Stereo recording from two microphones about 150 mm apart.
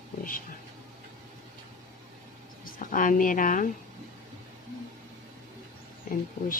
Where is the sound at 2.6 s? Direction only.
65° left (ahead or behind).